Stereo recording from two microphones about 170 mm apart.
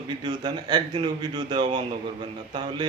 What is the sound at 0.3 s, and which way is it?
Speech, 25° right (ahead or behind).